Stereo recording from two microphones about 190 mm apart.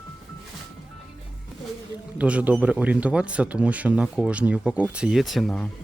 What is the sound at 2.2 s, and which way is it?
Speech, 5° right (ahead or behind).